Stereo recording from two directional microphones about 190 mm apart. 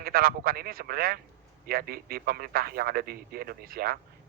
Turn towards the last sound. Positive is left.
turn(degrees=-50)  # may be behind; listen again after turning